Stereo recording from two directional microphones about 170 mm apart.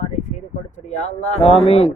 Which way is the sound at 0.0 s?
45° left (ahead or behind).